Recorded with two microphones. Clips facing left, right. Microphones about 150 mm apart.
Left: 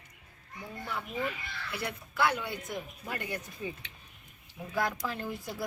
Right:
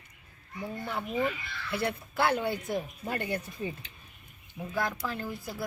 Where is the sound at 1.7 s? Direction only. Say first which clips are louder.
Right 7 dB; 30° right (ahead or behind).